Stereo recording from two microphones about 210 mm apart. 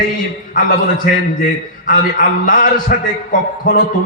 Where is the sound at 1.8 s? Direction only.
40° left (ahead or behind).